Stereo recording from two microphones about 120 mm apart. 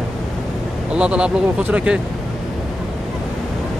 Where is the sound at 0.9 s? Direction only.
10° right (ahead or behind).